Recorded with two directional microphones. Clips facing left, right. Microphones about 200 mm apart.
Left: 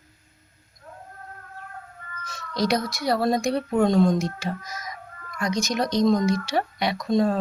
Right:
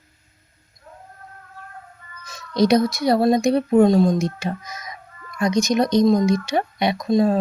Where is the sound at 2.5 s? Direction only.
20° right (ahead or behind).